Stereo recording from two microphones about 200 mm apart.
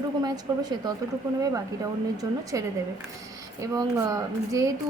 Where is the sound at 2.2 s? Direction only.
15° right (ahead or behind).